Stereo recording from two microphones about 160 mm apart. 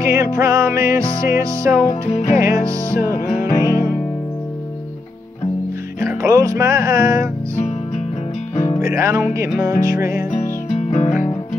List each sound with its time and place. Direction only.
0.0 s music: 20° right (ahead or behind)
1.9 s music: 45° left (ahead or behind)
2.3 s music: 20° right (ahead or behind)
5.9 s speech: 20° right (ahead or behind)
8.8 s music: 15° right (ahead or behind)
10.7 s music: 45° left (ahead or behind)